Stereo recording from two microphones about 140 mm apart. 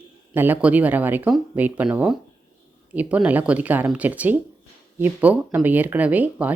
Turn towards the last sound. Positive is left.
turn(degrees=-10)  # may be behind; listen again after turning